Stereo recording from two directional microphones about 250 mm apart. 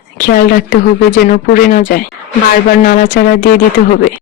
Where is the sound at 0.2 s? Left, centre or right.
Left.